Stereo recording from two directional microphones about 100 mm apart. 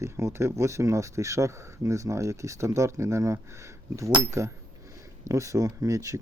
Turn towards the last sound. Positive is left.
turn(degrees=-35)  # may be behind; listen again after turning